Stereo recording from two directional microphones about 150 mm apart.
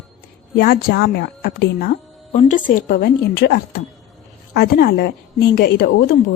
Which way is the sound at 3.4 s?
90° left.